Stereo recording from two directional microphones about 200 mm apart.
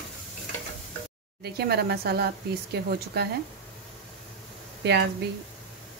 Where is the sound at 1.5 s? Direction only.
50° right (ahead or behind).